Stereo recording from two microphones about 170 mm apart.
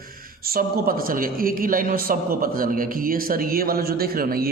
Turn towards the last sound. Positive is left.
turn(degrees=-60)  # may be behind; listen again after turning